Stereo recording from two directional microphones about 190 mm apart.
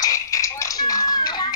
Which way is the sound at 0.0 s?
15° left (ahead or behind).